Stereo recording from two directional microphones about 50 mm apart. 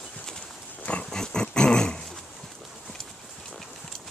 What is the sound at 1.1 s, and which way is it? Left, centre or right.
Dog, centre.